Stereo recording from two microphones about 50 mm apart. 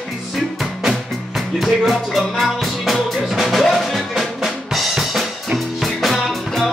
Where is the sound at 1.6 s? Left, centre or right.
Centre.